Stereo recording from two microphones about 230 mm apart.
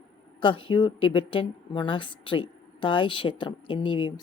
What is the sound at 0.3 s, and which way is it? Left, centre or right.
A woman's voice, left.